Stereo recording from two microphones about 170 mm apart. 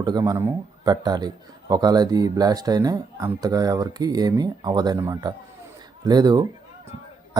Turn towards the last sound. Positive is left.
turn(degrees=-25)  # may be behind; listen again after turning